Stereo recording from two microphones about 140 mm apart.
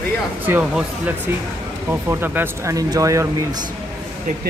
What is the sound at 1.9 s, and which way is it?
Speech, 15° right (ahead or behind).